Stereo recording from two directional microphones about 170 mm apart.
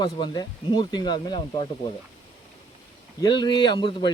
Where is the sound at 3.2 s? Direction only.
25° left (ahead or behind).